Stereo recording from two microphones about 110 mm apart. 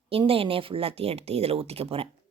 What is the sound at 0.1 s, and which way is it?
A woman's voice, 60° right (ahead or behind).